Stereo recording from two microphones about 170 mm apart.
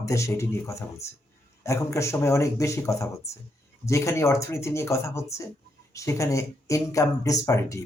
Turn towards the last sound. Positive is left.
turn(degrees=20)  # may be behind; listen again after turning